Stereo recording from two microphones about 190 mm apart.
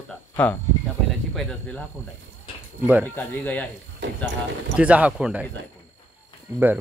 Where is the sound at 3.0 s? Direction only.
10° left (ahead or behind).